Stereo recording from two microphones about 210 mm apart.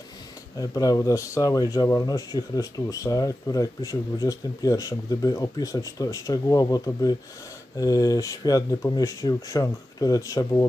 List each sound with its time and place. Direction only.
0.6 s speech: 15° left (ahead or behind)